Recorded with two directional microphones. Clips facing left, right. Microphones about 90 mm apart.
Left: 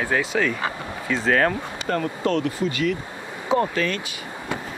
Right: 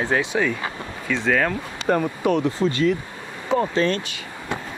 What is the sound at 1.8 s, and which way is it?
Speech, 15° right (ahead or behind).